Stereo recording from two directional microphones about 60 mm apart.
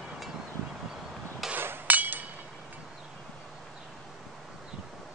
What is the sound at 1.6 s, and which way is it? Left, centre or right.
Hammer, right.